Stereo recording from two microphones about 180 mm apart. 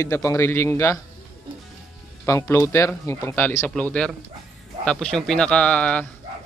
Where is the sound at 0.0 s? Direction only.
15° left (ahead or behind).